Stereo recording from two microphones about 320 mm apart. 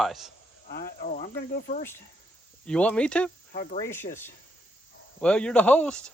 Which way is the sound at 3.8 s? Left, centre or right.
Centre.